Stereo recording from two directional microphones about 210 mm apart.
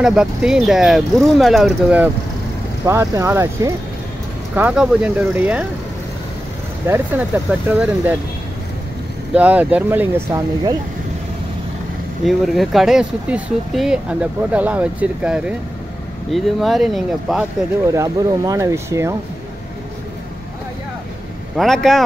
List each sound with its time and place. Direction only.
0.0 s speech: centre (ahead or behind)
6.9 s speech: 10° right (ahead or behind)
9.3 s speech: 5° right (ahead or behind)
12.3 s speech: centre (ahead or behind)
17.9 s speech: 15° right (ahead or behind)
21.5 s speech: centre (ahead or behind)